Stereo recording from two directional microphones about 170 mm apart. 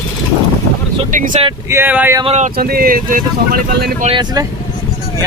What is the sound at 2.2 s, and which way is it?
Speech, 40° right (ahead or behind).